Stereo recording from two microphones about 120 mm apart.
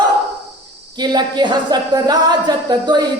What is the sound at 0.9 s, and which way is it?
A woman's voice, 35° right (ahead or behind).